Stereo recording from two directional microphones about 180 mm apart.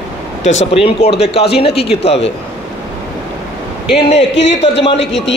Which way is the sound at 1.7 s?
65° left (ahead or behind).